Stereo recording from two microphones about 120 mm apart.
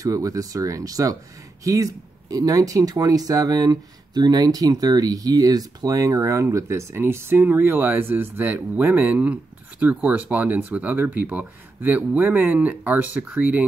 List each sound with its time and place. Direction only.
0.0 s speech: 30° right (ahead or behind)